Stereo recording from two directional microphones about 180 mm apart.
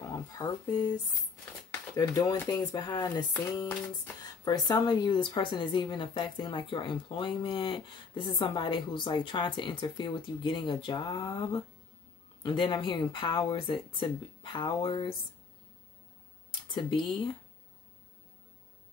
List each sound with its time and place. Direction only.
0.0 s a sound: 20° left (ahead or behind)
1.7 s speech: 20° left (ahead or behind)
16.6 s speech: 25° left (ahead or behind)